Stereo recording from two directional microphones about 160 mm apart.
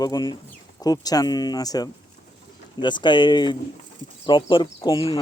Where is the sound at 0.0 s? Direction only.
25° left (ahead or behind).